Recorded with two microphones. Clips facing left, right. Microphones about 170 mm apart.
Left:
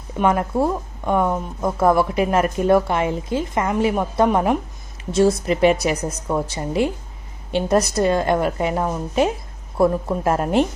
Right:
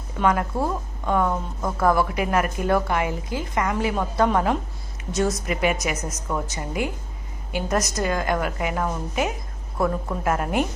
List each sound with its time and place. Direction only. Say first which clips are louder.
0.2 s speech: left 4 dB; 25° left (ahead or behind)
5.1 s a woman's voice: left 7 dB; 30° left (ahead or behind)